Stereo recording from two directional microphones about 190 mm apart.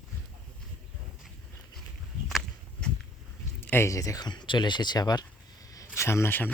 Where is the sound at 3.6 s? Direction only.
10° left (ahead or behind).